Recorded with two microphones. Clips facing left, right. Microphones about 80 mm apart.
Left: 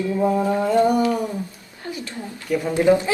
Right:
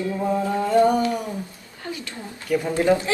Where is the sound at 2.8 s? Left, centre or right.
Centre.